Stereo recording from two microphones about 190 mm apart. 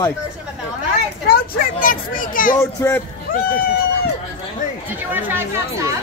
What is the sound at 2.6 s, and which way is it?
Speech, 15° left (ahead or behind).